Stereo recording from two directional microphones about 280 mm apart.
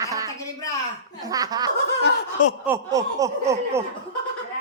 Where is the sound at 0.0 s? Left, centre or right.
Centre.